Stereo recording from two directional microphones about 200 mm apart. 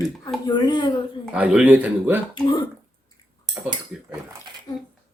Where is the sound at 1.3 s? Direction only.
5° right (ahead or behind).